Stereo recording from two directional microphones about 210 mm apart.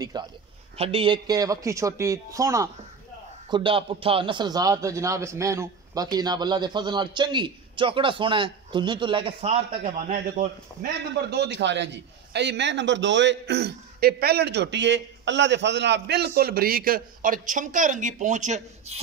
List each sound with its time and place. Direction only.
0.0 s a man's voice: 20° right (ahead or behind)
9.8 s a man's voice: 35° right (ahead or behind)